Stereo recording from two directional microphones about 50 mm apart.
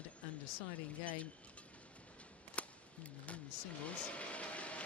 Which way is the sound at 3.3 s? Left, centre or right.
Left.